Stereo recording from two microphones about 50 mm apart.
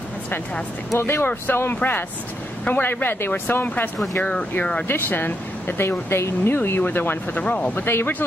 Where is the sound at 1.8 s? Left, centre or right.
Left.